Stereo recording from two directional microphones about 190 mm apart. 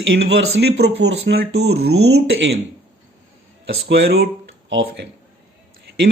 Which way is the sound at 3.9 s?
60° right (ahead or behind).